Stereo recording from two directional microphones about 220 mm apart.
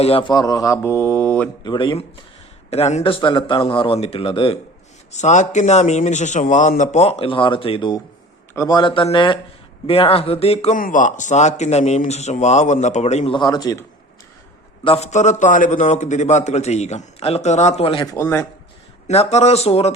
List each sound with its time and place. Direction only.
0.0 s speech: 25° left (ahead or behind); by 1.5 s 5° left (ahead or behind)
1.6 s a man's voice: 20° left (ahead or behind)
14.8 s a man's voice: 30° left (ahead or behind); by 18.4 s 10° left (ahead or behind)
19.0 s a man's voice: 30° left (ahead or behind)